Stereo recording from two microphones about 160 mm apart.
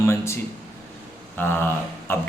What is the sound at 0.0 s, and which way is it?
Speech, 15° left (ahead or behind).